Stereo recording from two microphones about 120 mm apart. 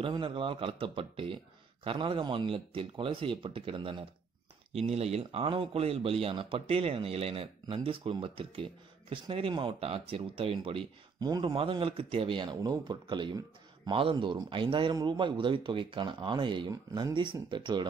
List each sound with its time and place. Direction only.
0.0 s speech: 45° right (ahead or behind)
4.7 s speech: 60° right (ahead or behind)
11.1 s speech: 35° right (ahead or behind)
11.5 s speech: 50° right (ahead or behind)